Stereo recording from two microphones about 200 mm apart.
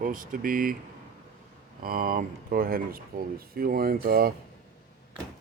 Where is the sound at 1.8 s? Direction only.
45° right (ahead or behind).